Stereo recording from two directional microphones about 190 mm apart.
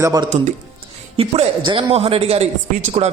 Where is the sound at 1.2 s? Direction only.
30° right (ahead or behind).